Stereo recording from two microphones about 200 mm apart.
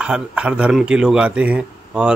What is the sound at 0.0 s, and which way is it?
Speech, 5° right (ahead or behind).